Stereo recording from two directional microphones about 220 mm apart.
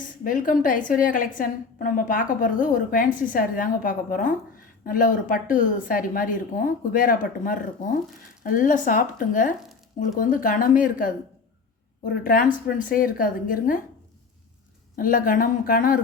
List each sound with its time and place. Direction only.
0.3 s a woman's voice: 35° left (ahead or behind)
14.9 s a woman's voice: 40° left (ahead or behind)